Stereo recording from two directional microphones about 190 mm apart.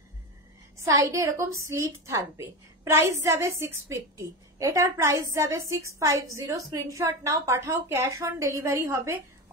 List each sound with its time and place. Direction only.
0.7 s a woman's voice: 15° right (ahead or behind)